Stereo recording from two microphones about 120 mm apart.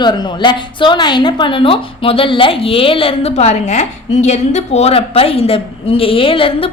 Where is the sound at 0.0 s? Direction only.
35° left (ahead or behind).